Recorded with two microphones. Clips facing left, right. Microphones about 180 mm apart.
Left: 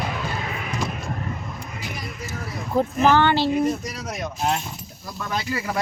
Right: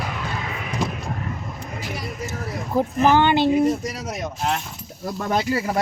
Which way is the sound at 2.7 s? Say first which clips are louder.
Right 1 dB; 15° right (ahead or behind).